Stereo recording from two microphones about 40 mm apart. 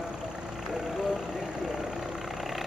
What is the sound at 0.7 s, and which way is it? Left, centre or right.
Vehicle, centre.